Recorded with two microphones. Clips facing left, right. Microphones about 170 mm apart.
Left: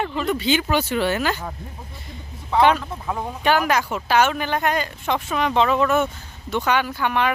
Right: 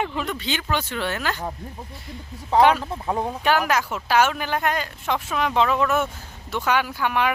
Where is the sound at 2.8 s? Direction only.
25° right (ahead or behind).